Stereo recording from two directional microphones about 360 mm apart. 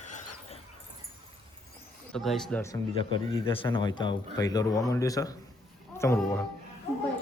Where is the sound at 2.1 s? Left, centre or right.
Centre.